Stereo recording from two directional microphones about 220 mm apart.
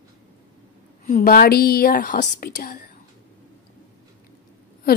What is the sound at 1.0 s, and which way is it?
A woman's voice, 40° left (ahead or behind).